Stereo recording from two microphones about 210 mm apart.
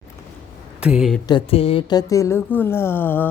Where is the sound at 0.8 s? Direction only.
5° right (ahead or behind).